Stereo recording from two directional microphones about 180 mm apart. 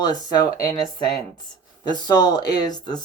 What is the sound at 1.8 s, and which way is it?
Speech, 25° left (ahead or behind).